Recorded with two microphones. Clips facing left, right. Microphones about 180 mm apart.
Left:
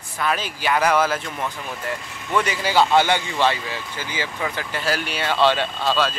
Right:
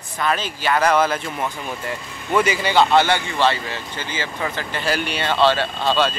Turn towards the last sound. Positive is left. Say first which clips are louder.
# right 2 dB
turn(degrees=0)  # may be behind; listen again after turning